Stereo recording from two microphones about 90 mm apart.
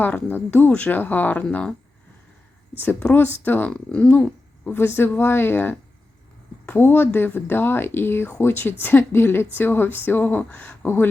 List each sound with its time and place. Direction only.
0.0 s speech: 20° left (ahead or behind)
2.7 s speech: 20° left (ahead or behind)